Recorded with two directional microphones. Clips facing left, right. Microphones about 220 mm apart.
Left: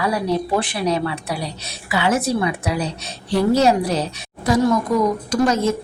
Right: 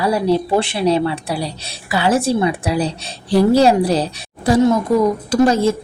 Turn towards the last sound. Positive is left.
turn(degrees=-30)  # may be behind; listen again after turning